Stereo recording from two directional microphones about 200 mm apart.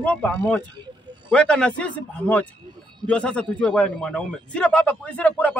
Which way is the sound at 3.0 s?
5° left (ahead or behind).